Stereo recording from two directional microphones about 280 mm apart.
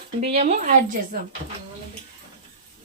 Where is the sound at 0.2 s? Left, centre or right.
Right.